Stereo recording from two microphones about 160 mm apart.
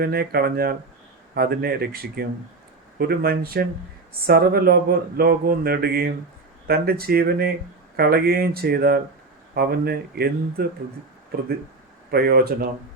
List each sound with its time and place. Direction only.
0.0 s speech: 70° right (ahead or behind)
12.1 s speech: 70° right (ahead or behind)